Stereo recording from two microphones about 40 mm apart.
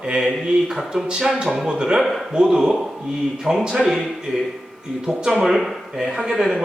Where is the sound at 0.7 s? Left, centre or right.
Centre.